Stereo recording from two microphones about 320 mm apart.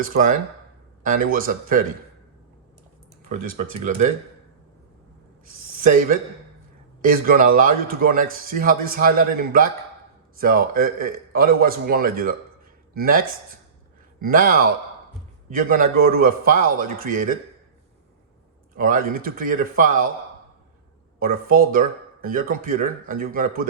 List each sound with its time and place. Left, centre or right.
0.0 s a man's voice: right
3.2 s a man's voice: right
5.5 s a man's voice: right
18.7 s a man's voice: right
21.2 s a man's voice: right